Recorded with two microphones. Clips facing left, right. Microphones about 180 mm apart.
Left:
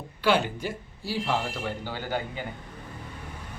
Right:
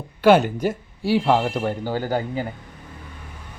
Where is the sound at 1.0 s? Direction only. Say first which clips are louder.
Right 10 dB; 60° right (ahead or behind); by 2.4 s 40° right (ahead or behind).